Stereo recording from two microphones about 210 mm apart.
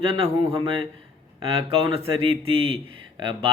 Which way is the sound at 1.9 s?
25° right (ahead or behind).